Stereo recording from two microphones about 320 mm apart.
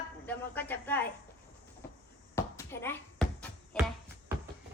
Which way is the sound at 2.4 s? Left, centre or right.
Centre.